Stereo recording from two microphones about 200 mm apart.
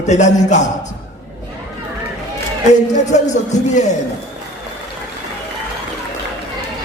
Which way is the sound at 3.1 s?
35° left (ahead or behind).